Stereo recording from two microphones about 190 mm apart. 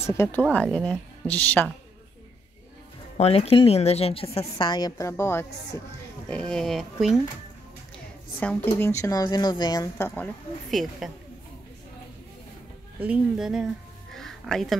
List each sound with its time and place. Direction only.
0.0 s speech: 10° left (ahead or behind)
3.2 s a woman's voice: 30° left (ahead or behind); by 7.2 s centre (ahead or behind)
8.7 s speech: 15° left (ahead or behind)
13.0 s speech: 5° right (ahead or behind)
14.1 s music: centre (ahead or behind)